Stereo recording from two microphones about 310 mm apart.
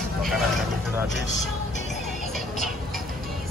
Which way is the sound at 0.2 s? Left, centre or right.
Centre.